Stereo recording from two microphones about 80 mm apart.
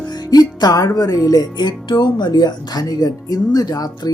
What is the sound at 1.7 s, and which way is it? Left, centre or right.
Speech, left.